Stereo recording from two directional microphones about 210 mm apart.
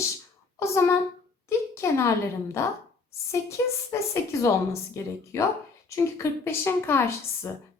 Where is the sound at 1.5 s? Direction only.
15° left (ahead or behind).